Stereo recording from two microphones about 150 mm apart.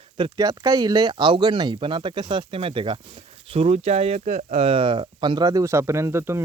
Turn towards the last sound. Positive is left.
turn(degrees=-15)  # may be behind; listen again after turning